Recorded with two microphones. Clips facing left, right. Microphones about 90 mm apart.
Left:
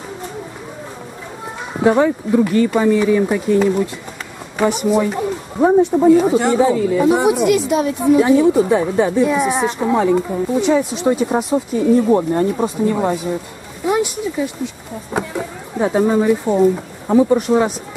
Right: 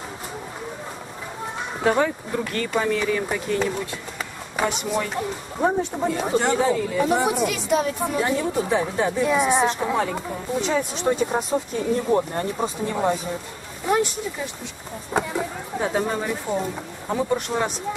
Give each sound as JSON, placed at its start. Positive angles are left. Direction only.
{"t": 1.8, "sound": "speech", "side_deg": 10}